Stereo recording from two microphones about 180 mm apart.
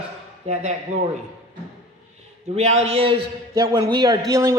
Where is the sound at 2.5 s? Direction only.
35° right (ahead or behind).